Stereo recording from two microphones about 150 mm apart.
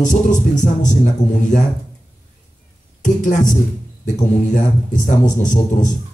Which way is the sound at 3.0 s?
55° left (ahead or behind).